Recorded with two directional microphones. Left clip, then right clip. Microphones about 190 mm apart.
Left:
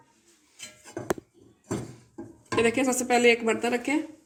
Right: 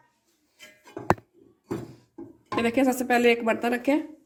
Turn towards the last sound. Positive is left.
turn(degrees=-55)  # may be behind; listen again after turning